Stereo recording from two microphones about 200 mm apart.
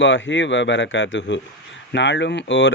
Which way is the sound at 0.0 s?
65° left (ahead or behind).